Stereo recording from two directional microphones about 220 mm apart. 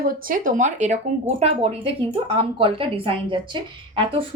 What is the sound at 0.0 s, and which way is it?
A woman's voice, 40° right (ahead or behind).